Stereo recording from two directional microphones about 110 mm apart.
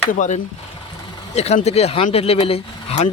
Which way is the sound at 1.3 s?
80° left.